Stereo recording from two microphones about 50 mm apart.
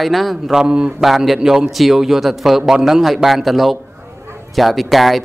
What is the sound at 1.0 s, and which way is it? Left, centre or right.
A man's voice, centre.